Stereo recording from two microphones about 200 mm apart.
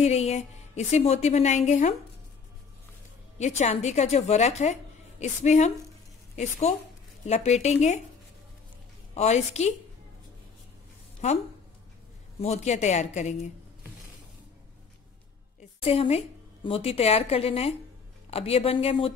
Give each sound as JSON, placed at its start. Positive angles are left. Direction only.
{"t": 0.0, "sound": "a woman's voice", "side_deg": 35}
{"t": 3.3, "sound": "a woman's voice", "side_deg": 35}
{"t": 7.2, "sound": "a woman's voice", "side_deg": 35}
{"t": 9.1, "sound": "a woman's voice", "side_deg": 35}
{"t": 12.4, "sound": "a woman's voice", "side_deg": 35}
{"t": 15.8, "sound": "a woman's voice", "side_deg": 30}